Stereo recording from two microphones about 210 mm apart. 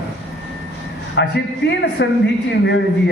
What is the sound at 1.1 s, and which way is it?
A man's voice, 55° left (ahead or behind).